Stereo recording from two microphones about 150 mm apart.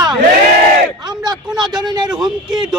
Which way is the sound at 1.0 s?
30° right (ahead or behind).